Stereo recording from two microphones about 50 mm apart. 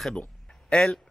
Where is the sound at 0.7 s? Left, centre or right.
Left.